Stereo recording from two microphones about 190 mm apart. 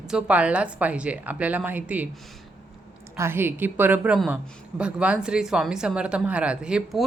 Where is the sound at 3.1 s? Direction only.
15° right (ahead or behind).